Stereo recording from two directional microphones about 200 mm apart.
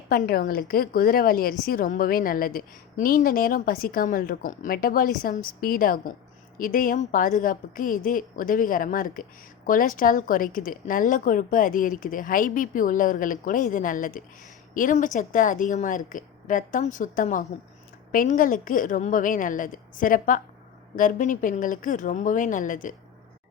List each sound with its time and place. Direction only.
0.1 s a woman's voice: 45° left (ahead or behind)